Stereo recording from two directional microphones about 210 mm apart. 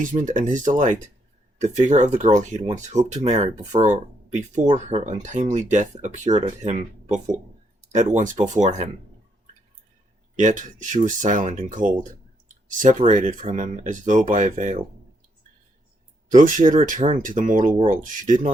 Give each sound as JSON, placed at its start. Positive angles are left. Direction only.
{"t": 0.0, "sound": "speech", "side_deg": -35}
{"t": 10.3, "sound": "speech", "side_deg": -35}
{"t": 16.3, "sound": "speech", "side_deg": -40}